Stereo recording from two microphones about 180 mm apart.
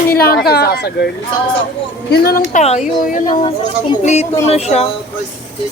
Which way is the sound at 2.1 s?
55° left (ahead or behind).